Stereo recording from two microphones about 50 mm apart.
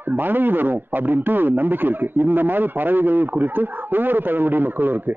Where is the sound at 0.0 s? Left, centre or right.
Right.